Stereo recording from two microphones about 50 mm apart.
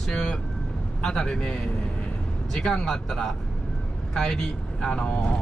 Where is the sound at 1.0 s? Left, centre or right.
Centre.